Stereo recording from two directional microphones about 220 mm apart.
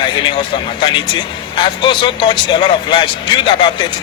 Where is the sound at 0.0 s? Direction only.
20° left (ahead or behind).